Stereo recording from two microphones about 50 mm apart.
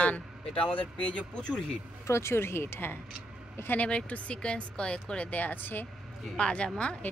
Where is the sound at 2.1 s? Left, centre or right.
Left.